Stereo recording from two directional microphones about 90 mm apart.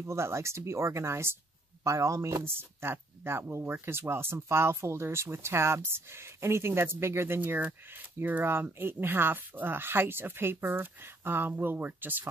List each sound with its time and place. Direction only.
0.0 s speech: 30° right (ahead or behind)
2.4 s speech: 25° right (ahead or behind)